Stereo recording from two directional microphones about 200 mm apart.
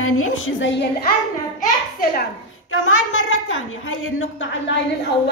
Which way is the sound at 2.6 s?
90° left.